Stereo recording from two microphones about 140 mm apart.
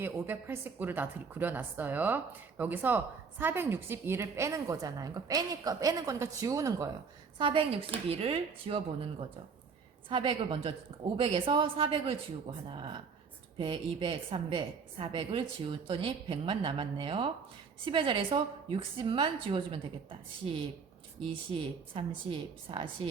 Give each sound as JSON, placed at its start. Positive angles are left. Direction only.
{"t": 0.0, "sound": "a woman's voice", "side_deg": -15}
{"t": 7.3, "sound": "a woman's voice", "side_deg": -35}
{"t": 10.1, "sound": "a woman's voice", "side_deg": -40}
{"t": 21.9, "sound": "a woman's voice", "side_deg": -40}